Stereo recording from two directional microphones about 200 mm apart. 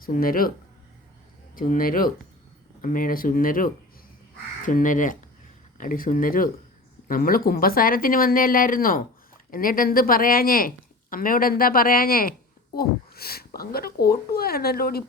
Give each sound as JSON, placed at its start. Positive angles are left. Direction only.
{"t": 0.0, "sound": "speech", "side_deg": 45}
{"t": 1.5, "sound": "speech", "side_deg": 45}